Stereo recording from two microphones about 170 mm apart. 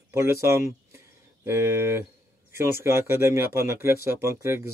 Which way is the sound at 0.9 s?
15° right (ahead or behind).